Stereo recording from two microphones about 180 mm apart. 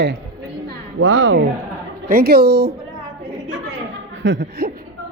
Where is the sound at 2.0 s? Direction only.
55° right (ahead or behind).